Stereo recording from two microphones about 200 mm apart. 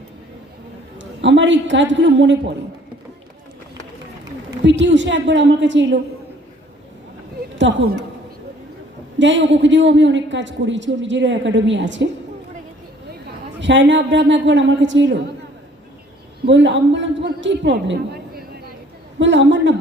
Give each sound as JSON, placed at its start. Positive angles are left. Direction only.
{"t": 0.9, "sound": "a woman's voice", "side_deg": -65}
{"t": 4.6, "sound": "a woman's voice", "side_deg": -65}
{"t": 9.1, "sound": "a woman's voice", "side_deg": -65}
{"t": 13.6, "sound": "a woman's voice", "side_deg": -65}
{"t": 16.5, "sound": "a woman's voice", "side_deg": -65}
{"t": 19.2, "sound": "a woman's voice", "side_deg": -65}